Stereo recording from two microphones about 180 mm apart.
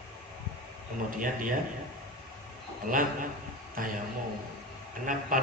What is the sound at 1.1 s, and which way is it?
Speech, 45° right (ahead or behind).